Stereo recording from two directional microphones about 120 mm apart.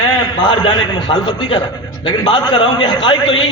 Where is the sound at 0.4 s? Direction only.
40° left (ahead or behind).